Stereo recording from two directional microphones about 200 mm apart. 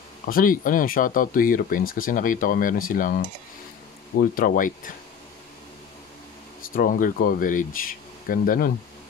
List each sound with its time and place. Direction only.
0.3 s speech: 45° left (ahead or behind)
4.2 s speech: 45° left (ahead or behind)
6.7 s speech: 45° left (ahead or behind)